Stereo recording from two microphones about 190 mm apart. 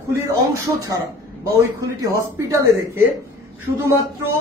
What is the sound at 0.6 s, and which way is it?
A man's voice, 15° right (ahead or behind).